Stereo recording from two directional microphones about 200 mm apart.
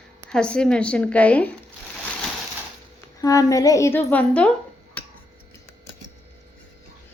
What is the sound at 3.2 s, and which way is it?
Speech, 15° left (ahead or behind).